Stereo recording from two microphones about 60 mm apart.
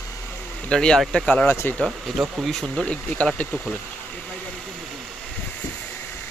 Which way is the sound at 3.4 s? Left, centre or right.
Left.